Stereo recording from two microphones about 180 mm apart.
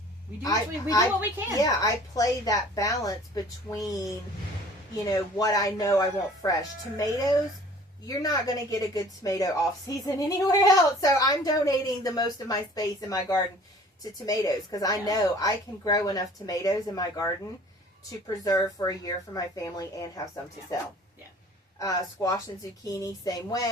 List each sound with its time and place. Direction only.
0.4 s a woman's voice: 20° left (ahead or behind)
5.0 s a woman's voice: 20° left (ahead or behind)
18.4 s a woman's voice: 20° left (ahead or behind)
21.8 s a woman's voice: 20° left (ahead or behind)